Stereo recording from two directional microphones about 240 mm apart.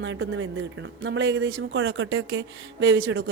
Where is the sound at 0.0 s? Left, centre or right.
Right.